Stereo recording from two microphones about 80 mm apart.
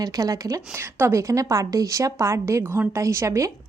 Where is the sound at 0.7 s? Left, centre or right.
Right.